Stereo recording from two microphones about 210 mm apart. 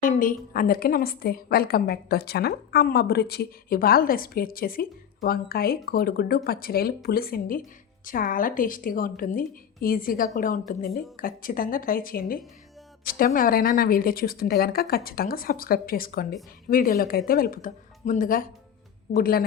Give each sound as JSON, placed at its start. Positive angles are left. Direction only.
{"t": 0.0, "sound": "a woman's voice", "side_deg": 40}